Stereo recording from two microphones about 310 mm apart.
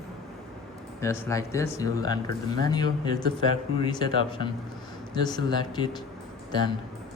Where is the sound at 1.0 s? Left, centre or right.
Centre.